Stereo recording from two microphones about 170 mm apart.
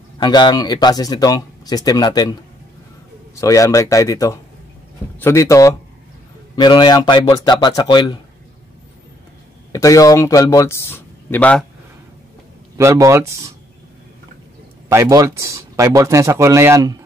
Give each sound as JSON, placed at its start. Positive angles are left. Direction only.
{"t": 0.2, "sound": "speech", "side_deg": 25}
{"t": 3.3, "sound": "speech", "side_deg": 20}
{"t": 9.7, "sound": "speech", "side_deg": 20}
{"t": 12.7, "sound": "a man's voice", "side_deg": -15}
{"t": 14.9, "sound": "a man's voice", "side_deg": -15}